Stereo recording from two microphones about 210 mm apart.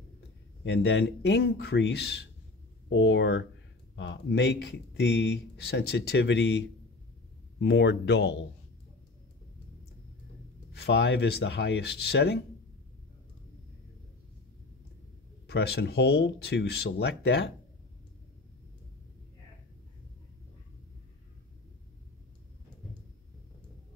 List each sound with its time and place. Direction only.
0.7 s speech: 55° left (ahead or behind)
10.7 s speech: 55° left (ahead or behind)
15.4 s speech: 50° left (ahead or behind)